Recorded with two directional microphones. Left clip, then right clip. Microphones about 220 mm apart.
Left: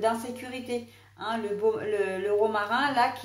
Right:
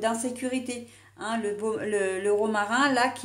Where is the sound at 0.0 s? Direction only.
45° right (ahead or behind).